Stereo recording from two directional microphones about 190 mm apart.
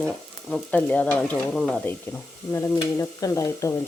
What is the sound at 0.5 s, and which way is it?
Speech, 5° left (ahead or behind).